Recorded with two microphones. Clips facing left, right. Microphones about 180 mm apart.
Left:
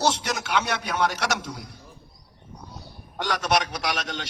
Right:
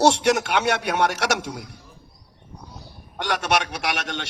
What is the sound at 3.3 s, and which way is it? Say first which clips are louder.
Speech: right 1 dB; 70° right (ahead or behind).